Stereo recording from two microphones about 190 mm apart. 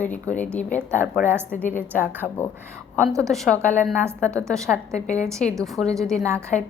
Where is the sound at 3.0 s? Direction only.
15° right (ahead or behind).